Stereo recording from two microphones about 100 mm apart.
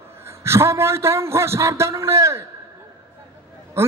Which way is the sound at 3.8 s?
25° right (ahead or behind).